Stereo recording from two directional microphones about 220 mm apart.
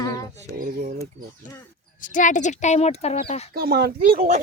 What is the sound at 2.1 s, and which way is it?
Speech, 35° left (ahead or behind).